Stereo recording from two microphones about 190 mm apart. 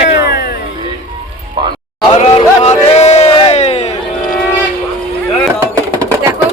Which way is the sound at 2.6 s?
35° left (ahead or behind).